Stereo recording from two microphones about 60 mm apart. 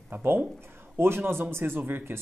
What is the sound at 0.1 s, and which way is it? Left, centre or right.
A man's voice, right.